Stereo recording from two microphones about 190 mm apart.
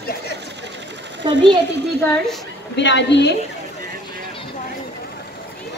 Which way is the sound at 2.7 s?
70° left (ahead or behind).